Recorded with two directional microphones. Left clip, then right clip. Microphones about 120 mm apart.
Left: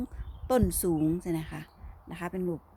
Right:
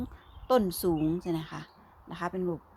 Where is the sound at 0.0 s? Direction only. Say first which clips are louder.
Left 1 dB; 35° left (ahead or behind).